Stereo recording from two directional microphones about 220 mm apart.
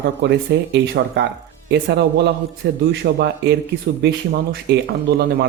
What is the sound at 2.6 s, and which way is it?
Speech, 50° right (ahead or behind).